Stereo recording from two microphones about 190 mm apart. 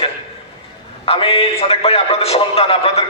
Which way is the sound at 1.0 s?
30° left (ahead or behind).